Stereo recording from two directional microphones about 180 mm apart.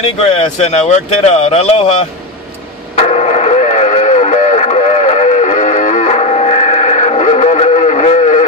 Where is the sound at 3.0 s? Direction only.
35° left (ahead or behind).